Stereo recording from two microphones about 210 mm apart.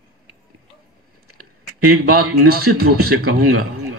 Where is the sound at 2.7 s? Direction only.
45° right (ahead or behind).